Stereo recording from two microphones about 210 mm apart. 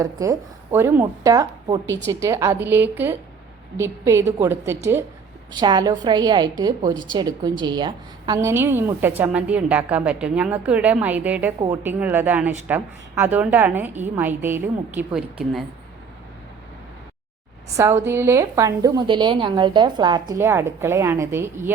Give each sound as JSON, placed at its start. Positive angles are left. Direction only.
{"t": 0.0, "sound": "a woman's voice", "side_deg": -15}
{"t": 17.7, "sound": "a woman's voice", "side_deg": -15}